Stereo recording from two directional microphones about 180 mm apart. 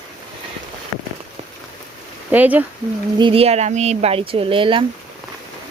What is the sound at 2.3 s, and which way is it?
Speech, 10° right (ahead or behind).